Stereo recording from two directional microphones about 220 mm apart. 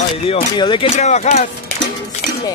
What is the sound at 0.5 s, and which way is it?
Speech, 20° left (ahead or behind).